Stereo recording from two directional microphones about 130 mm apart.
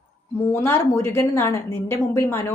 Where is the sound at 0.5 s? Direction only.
20° left (ahead or behind).